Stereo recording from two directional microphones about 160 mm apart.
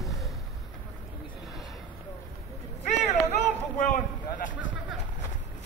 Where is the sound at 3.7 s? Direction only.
50° left (ahead or behind).